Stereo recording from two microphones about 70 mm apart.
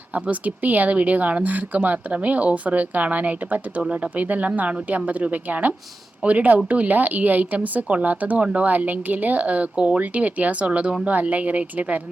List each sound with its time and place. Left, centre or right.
0.1 s speech: right